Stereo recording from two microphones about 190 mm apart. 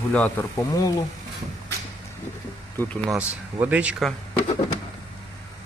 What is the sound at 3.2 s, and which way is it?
Speech, 5° right (ahead or behind).